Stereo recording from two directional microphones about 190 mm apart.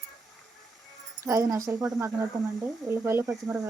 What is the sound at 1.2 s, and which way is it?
Speech, 15° right (ahead or behind).